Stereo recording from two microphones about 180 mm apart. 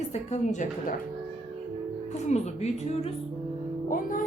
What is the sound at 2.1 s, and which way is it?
A woman's voice, 40° left (ahead or behind).